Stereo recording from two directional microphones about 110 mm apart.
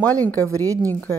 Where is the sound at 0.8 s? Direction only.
15° left (ahead or behind).